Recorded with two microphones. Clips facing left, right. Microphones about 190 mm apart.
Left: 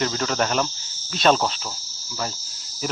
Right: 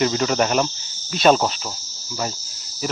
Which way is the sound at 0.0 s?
10° right (ahead or behind).